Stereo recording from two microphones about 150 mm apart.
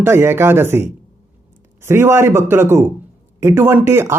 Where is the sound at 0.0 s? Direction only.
15° right (ahead or behind).